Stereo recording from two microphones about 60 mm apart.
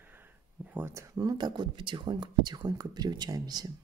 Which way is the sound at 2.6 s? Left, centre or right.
Right.